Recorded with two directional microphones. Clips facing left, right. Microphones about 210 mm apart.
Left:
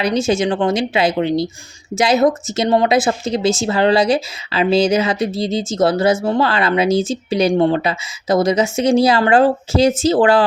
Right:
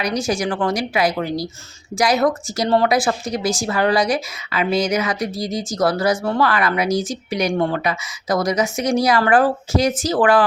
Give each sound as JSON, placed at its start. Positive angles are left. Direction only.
{"t": 0.0, "sound": "speech", "side_deg": 25}